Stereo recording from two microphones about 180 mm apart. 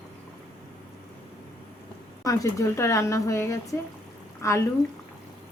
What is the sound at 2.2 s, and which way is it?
A woman's voice, 15° left (ahead or behind).